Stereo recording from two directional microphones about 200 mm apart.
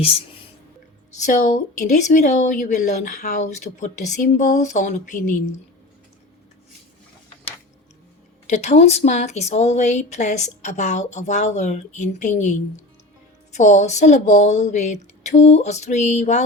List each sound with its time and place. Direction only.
0.0 s speech: 30° left (ahead or behind)
8.4 s speech: 35° left (ahead or behind)